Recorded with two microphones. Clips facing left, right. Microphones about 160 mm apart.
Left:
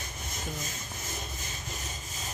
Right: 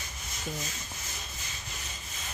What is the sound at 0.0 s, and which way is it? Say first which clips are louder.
Rub: left 1 dB; 50° left (ahead or behind).